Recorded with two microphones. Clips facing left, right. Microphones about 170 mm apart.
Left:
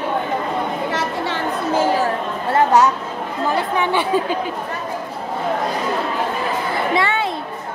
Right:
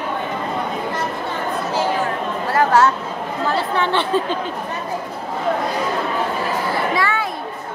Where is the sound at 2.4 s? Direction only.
20° left (ahead or behind).